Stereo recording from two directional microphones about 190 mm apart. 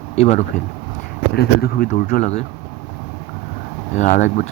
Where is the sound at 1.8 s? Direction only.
40° left (ahead or behind).